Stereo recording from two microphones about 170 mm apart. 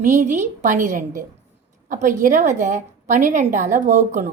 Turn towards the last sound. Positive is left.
turn(degrees=-45)  # may be behind; listen again after turning